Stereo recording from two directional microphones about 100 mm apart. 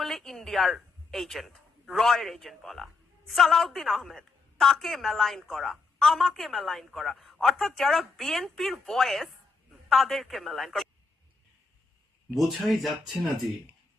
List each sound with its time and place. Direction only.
0.0 s speech: centre (ahead or behind)
12.3 s speech: centre (ahead or behind)